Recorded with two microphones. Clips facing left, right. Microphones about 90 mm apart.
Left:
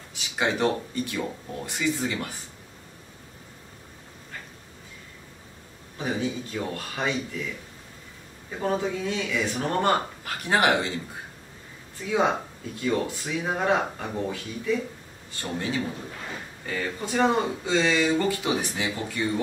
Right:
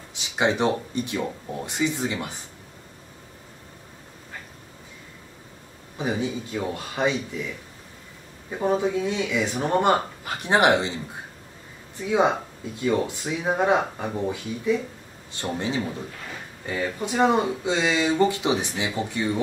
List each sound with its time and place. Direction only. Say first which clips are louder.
0.1 s speech: right 3 dB; 20° right (ahead or behind)
5.9 s speech: right 2 dB; 15° right (ahead or behind)
8.5 s speech: right 4 dB; 15° right (ahead or behind)
12.8 s speech: right 3 dB; 20° right (ahead or behind)